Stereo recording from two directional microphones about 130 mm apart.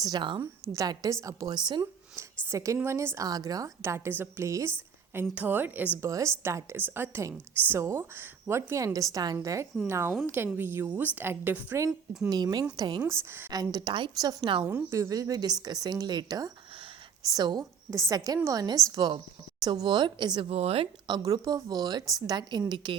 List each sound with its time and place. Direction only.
0.0 s speech: 35° right (ahead or behind)
0.8 s a woman's voice: 25° right (ahead or behind)
2.5 s a woman's voice: 25° right (ahead or behind)
11.9 s a woman's voice: 5° right (ahead or behind)
12.3 s speech: 30° right (ahead or behind)
13.1 s a woman's voice: 20° right (ahead or behind)
13.5 s speech: 30° right (ahead or behind)
14.6 s a woman's voice: 10° right (ahead or behind); by 20.5 s 35° right (ahead or behind)
20.5 s a woman's voice: 50° right (ahead or behind)
21.1 s speech: 30° right (ahead or behind)